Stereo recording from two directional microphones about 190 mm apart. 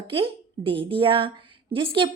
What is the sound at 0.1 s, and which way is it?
A woman's voice, 30° right (ahead or behind).